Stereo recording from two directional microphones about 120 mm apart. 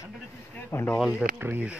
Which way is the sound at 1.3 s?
15° right (ahead or behind).